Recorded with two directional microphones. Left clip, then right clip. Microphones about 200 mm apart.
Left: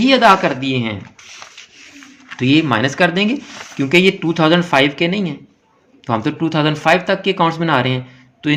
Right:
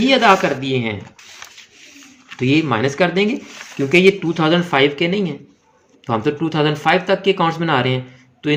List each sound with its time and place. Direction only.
0.0 s speech: 20° left (ahead or behind)
2.3 s speech: 20° left (ahead or behind)